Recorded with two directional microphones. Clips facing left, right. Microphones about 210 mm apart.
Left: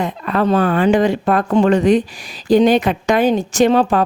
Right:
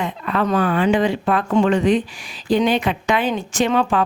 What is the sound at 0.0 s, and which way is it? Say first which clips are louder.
Speech: left 4 dB; 40° left (ahead or behind).